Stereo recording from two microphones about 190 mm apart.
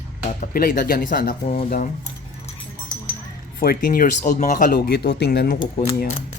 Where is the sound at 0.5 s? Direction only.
50° left (ahead or behind).